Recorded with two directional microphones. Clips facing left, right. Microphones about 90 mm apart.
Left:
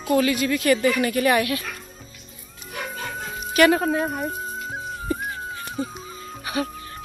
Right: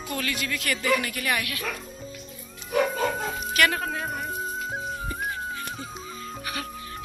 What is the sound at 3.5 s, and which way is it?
Speech, 20° left (ahead or behind).